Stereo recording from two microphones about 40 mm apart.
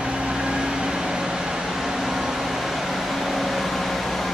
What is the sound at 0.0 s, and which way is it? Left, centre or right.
Vehicle, right.